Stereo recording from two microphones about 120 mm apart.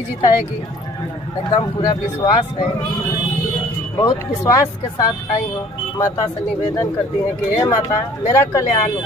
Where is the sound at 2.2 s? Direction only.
35° left (ahead or behind).